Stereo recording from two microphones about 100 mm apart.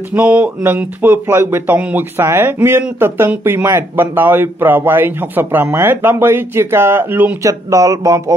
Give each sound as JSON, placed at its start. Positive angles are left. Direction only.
{"t": 0.1, "sound": "speech", "side_deg": -20}
{"t": 7.4, "sound": "speech", "side_deg": -35}